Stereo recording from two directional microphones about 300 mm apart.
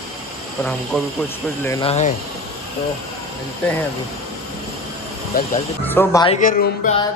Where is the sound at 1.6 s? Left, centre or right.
Centre.